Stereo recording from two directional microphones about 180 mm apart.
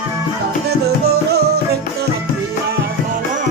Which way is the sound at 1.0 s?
60° right (ahead or behind).